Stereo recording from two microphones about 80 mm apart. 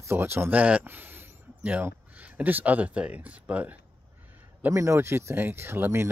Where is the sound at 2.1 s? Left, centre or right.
Centre.